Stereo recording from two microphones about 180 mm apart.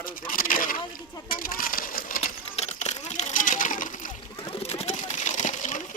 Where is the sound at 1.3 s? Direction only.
50° left (ahead or behind).